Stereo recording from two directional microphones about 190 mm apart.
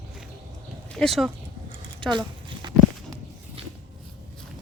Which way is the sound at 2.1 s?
25° right (ahead or behind).